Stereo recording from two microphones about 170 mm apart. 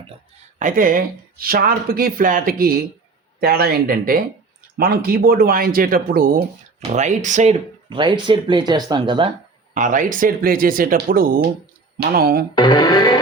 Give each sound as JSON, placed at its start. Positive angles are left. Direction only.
{"t": 0.6, "sound": "speech", "side_deg": -55}
{"t": 7.9, "sound": "speech", "side_deg": -30}
{"t": 9.7, "sound": "speech", "side_deg": -50}
{"t": 12.5, "sound": "speech", "side_deg": 25}